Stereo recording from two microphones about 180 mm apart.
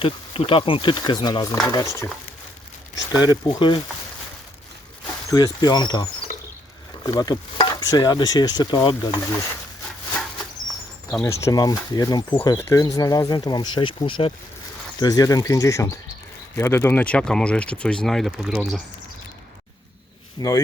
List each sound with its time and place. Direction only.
0.0 s speech: 30° left (ahead or behind)
3.2 s speech: 20° left (ahead or behind)
5.3 s speech: 20° left (ahead or behind)
11.2 s speech: 15° left (ahead or behind); by 18.8 s centre (ahead or behind)
20.4 s speech: 20° left (ahead or behind)